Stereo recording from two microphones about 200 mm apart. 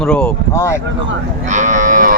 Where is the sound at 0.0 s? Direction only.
5° left (ahead or behind).